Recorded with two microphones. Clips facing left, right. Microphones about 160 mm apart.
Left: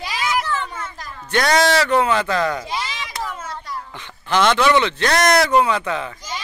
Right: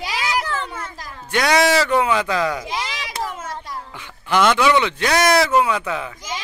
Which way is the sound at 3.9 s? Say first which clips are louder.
Right 1 dB; 10° right (ahead or behind).